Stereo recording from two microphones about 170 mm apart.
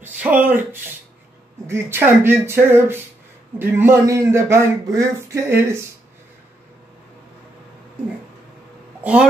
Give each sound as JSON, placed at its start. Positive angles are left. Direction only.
{"t": 0.0, "sound": "speech", "side_deg": -10}
{"t": 1.7, "sound": "a man's voice", "side_deg": -15}
{"t": 9.0, "sound": "speech", "side_deg": -10}